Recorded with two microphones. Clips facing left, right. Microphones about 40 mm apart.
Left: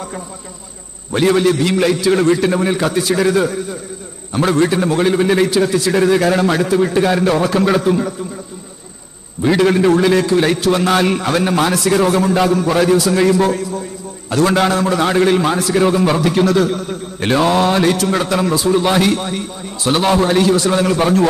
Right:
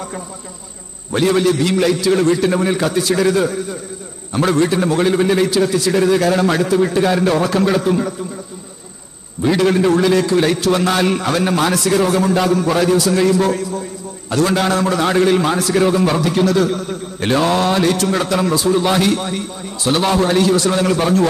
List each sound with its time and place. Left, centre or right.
1.3 s a man's voice: centre
2.5 s a man's voice: centre
7.8 s a man's voice: centre
9.5 s a man's voice: centre
13.5 s a man's voice: centre